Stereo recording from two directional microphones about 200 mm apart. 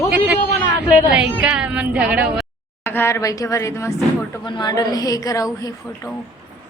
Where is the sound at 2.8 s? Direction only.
10° left (ahead or behind).